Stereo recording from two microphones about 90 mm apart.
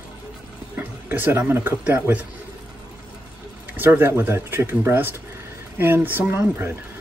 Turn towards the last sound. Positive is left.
turn(degrees=-25)  # may be behind; listen again after turning